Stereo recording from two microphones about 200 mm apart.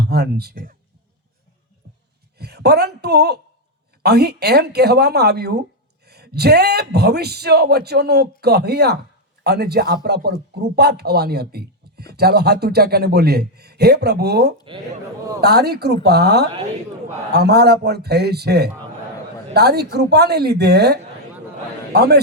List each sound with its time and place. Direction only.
0.0 s speech: 55° right (ahead or behind)
2.4 s speech: 55° right (ahead or behind)